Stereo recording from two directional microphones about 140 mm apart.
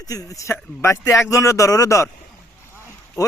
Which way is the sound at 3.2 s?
25° left (ahead or behind).